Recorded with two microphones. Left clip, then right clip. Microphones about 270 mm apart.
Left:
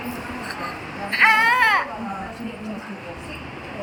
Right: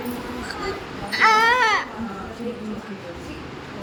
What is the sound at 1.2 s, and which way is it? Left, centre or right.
Baby cry, centre.